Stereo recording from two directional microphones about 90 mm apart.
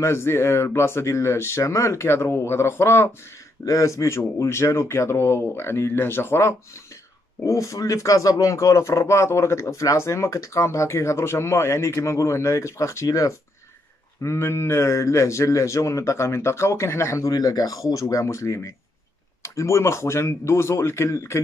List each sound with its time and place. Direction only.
0.0 s speech: 30° left (ahead or behind)